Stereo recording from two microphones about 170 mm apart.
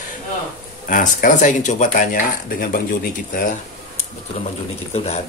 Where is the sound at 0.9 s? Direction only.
50° left (ahead or behind).